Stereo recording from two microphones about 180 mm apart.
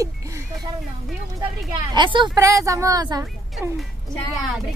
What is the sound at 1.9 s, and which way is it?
A woman's voice, 25° right (ahead or behind).